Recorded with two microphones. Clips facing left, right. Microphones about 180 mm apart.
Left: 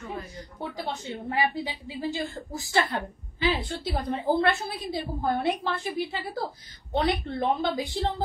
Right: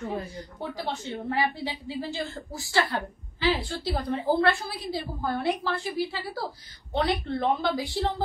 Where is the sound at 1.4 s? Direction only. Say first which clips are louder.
Left 3 dB; 15° left (ahead or behind).